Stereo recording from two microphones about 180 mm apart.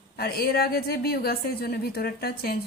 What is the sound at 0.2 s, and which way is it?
A woman's voice, 55° left (ahead or behind).